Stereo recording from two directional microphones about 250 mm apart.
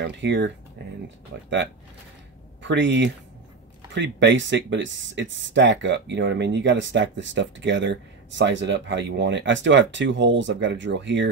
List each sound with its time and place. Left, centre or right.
0.0 s speech: right
2.6 s speech: right